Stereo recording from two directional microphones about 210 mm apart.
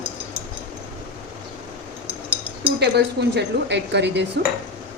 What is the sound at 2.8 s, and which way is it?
A woman's voice, 55° right (ahead or behind).